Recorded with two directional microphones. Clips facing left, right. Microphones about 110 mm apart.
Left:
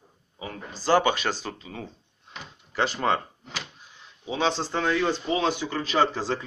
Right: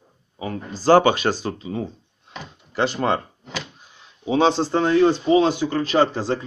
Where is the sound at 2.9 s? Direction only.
25° right (ahead or behind).